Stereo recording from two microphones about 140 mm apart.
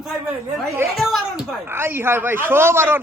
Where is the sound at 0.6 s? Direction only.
20° right (ahead or behind).